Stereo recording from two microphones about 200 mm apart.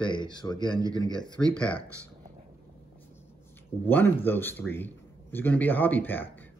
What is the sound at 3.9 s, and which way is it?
A man's voice, 10° left (ahead or behind).